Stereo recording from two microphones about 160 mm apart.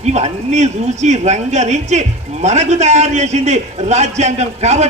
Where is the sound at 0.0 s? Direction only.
45° right (ahead or behind).